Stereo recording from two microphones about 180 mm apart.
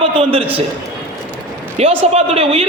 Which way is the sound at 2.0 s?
35° right (ahead or behind).